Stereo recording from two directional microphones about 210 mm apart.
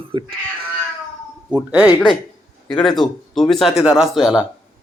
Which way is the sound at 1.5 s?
5° right (ahead or behind).